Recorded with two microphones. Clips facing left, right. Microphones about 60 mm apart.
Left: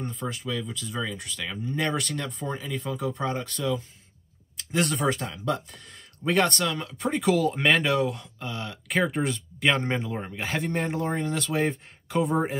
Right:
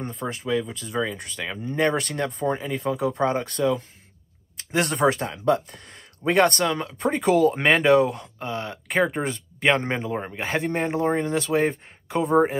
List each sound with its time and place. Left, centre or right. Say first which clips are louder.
0.3 s speech: right 6 dB; right
2.7 s speech: right 5 dB; right
4.6 s a sound: right 2 dB; right
4.9 s speech: right 5 dB; right
6.6 s speech: right 4 dB; right
6.9 s speech: right 2 dB; right
8.4 s speech: right 5 dB; right
8.8 s speech: right 3 dB; centre
9.1 s speech: even; right
10.3 s a man's voice: right 3 dB; centre
10.7 s speech: right 6 dB; right
11.5 s speech: right 4 dB; centre